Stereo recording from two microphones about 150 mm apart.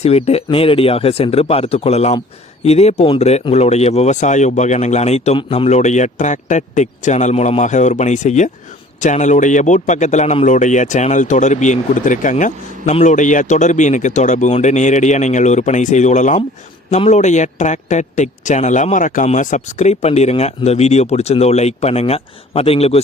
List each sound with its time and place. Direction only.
0.0 s speech: 45° left (ahead or behind)